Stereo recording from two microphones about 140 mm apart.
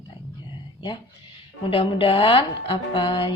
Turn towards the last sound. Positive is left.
turn(degrees=35)  # may be behind; listen again after turning